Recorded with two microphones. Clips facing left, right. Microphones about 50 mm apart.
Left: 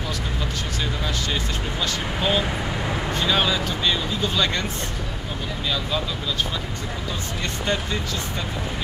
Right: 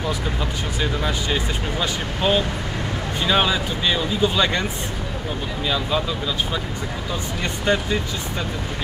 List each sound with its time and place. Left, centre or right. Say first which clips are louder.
1.0 s speech: right 3 dB; centre
5.7 s speech: right 3 dB; centre
7.6 s speech: right 5 dB; centre